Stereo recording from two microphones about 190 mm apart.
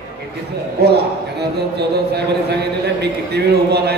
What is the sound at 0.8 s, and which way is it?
A man's voice, 60° right (ahead or behind).